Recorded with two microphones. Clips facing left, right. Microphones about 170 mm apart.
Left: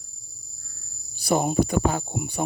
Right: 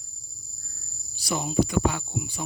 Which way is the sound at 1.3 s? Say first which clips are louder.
Left 4 dB; 50° left (ahead or behind).